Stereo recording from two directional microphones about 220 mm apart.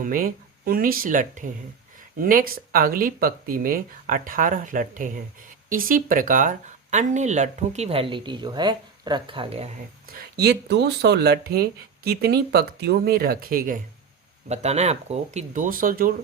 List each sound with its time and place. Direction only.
0.0 s speech: 40° right (ahead or behind)
10.1 s speech: 45° right (ahead or behind)